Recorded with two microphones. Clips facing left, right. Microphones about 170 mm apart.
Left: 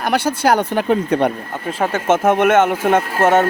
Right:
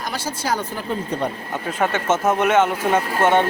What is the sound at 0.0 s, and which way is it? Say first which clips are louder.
Speech: left 10 dB; 65° left (ahead or behind).